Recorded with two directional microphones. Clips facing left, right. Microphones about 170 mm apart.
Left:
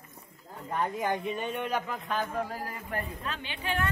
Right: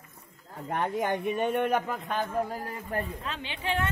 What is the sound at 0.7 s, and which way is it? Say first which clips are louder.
A man's voice: right 2 dB; 65° right (ahead or behind).